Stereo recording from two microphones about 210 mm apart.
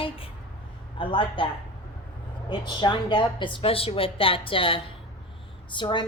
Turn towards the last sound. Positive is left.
turn(degrees=20)  # may be behind; listen again after turning